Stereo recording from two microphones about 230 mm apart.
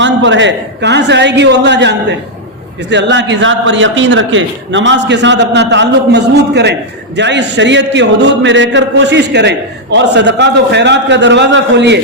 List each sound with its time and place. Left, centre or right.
0.0 s a man's voice: right